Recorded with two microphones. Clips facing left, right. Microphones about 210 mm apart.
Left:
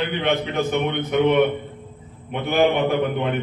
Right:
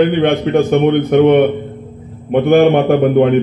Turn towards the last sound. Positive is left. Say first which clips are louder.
# right 11 dB
turn(degrees=-55)  # may be behind; listen again after turning